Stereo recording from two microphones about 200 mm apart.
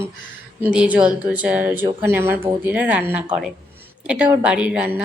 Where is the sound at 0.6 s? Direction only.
5° right (ahead or behind).